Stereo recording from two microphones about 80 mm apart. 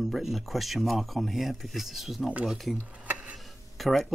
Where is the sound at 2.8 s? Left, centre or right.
Centre.